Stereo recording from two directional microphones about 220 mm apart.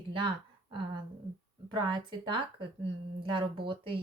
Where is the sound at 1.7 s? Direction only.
20° right (ahead or behind).